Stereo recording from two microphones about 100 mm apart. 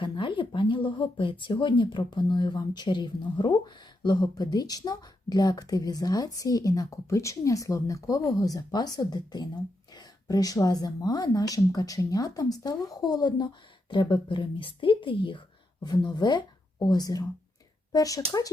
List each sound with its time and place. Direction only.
0.0 s speech: 55° left (ahead or behind)
13.9 s a woman's voice: 55° left (ahead or behind)
15.8 s speech: 45° left (ahead or behind)